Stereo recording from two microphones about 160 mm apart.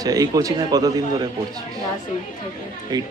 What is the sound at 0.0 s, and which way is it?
Speech, 20° right (ahead or behind).